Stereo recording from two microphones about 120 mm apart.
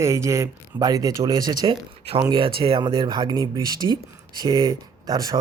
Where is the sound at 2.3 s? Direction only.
45° right (ahead or behind).